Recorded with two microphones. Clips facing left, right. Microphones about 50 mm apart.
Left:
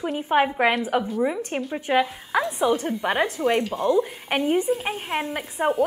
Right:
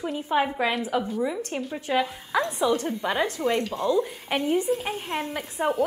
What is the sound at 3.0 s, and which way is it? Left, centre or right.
A woman's voice, left.